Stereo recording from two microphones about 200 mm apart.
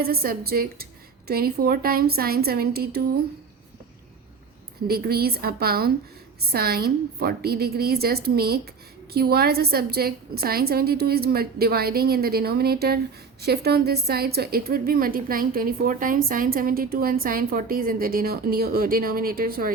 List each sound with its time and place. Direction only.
0.0 s a woman's voice: 50° right (ahead or behind)
4.9 s a woman's voice: 50° right (ahead or behind)